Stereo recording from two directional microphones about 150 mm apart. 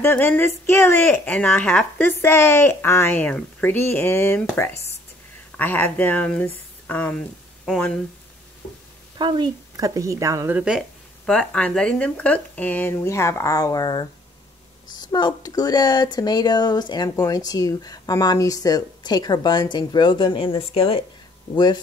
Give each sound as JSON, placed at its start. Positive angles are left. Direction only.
{"t": 0.0, "sound": "a woman's voice", "side_deg": 15}
{"t": 5.6, "sound": "speech", "side_deg": 10}
{"t": 9.2, "sound": "a woman's voice", "side_deg": -30}
{"t": 11.2, "sound": "a woman's voice", "side_deg": 5}